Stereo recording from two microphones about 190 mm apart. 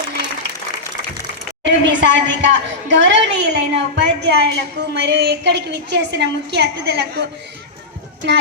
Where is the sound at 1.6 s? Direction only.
75° right (ahead or behind).